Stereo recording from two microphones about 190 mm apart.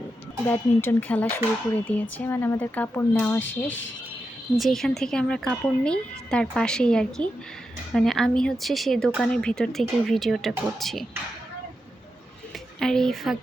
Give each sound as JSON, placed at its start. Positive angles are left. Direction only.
{"t": 0.4, "sound": "speech", "side_deg": 10}
{"t": 3.7, "sound": "speech", "side_deg": 80}
{"t": 4.5, "sound": "speech", "side_deg": 0}
{"t": 12.8, "sound": "speech", "side_deg": 5}